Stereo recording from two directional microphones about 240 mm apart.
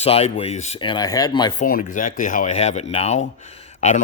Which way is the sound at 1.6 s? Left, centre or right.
Left.